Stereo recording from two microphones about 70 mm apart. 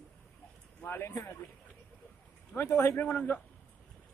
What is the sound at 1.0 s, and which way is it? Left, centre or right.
Speech, left.